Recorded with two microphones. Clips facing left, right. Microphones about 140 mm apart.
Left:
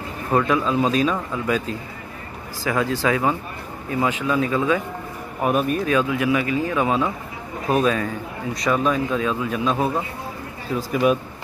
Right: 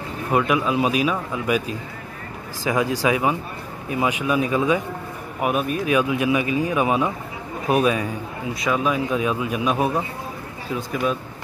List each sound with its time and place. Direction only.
0.3 s speech: 15° right (ahead or behind)
5.4 s speech: centre (ahead or behind)
5.9 s speech: 15° right (ahead or behind)
10.8 s speech: 5° left (ahead or behind)